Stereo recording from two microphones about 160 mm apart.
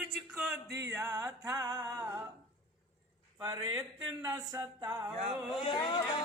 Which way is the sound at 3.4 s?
25° right (ahead or behind).